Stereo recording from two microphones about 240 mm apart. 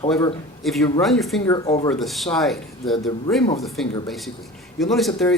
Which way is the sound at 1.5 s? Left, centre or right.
Centre.